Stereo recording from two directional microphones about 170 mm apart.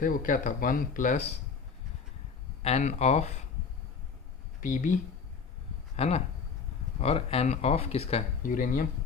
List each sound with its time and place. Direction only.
0.0 s speech: 55° left (ahead or behind)
2.6 s speech: 40° left (ahead or behind)
4.6 s speech: 50° left (ahead or behind)
6.0 s speech: 40° left (ahead or behind)
8.4 s speech: 50° left (ahead or behind)